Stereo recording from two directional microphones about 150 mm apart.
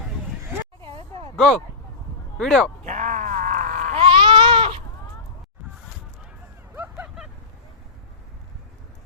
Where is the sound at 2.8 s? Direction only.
55° right (ahead or behind).